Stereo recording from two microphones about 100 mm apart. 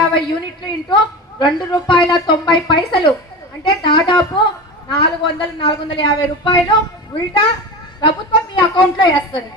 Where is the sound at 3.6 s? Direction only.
50° left (ahead or behind).